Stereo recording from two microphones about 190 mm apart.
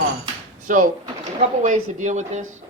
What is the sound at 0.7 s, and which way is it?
Speech, 45° right (ahead or behind).